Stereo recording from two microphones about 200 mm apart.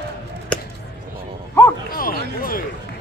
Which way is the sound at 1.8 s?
45° left (ahead or behind).